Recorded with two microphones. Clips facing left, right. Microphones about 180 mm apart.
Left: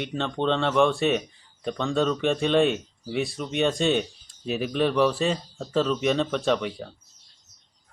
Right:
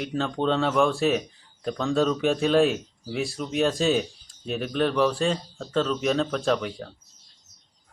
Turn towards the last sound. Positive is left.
turn(degrees=0)  # may be behind; listen again after turning